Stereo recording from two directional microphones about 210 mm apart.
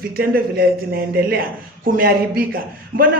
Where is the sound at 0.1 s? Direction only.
45° right (ahead or behind).